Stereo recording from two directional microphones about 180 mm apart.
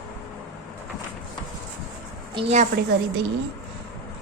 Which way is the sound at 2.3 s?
35° right (ahead or behind).